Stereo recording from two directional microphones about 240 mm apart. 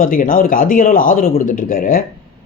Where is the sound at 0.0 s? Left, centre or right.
Left.